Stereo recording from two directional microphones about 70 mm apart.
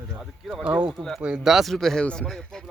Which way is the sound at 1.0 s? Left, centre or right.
Centre.